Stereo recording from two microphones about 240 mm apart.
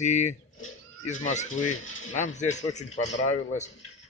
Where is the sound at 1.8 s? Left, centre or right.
Left.